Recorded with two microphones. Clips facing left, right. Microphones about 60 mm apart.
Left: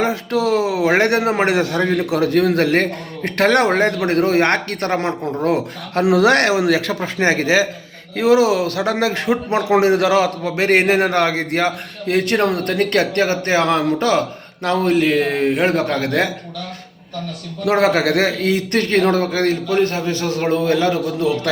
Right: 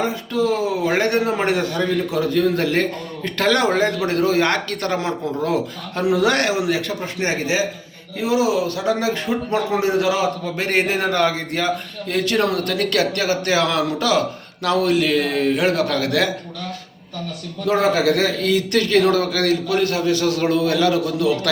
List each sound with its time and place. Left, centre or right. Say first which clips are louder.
0.0 s a man's voice: left 2 dB; left
5.9 s a man's voice: left 5 dB; left
10.8 s a man's voice: left 5 dB; left
11.1 s a man's voice: left 2 dB; left
17.7 s a man's voice: left 2 dB; left
18.3 s a man's voice: left 1 dB; left